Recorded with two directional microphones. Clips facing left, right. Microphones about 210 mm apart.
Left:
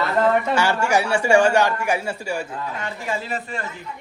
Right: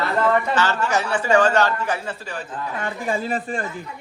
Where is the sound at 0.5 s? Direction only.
10° left (ahead or behind).